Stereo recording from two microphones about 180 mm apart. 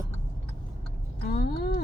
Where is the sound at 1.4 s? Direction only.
60° left (ahead or behind).